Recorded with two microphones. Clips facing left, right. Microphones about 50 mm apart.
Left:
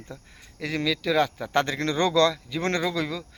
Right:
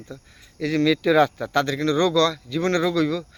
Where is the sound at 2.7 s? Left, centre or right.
Centre.